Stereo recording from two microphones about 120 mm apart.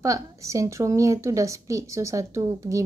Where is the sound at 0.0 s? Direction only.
25° right (ahead or behind).